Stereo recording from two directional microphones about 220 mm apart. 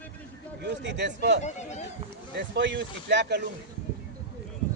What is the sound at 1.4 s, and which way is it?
Speech, 30° left (ahead or behind).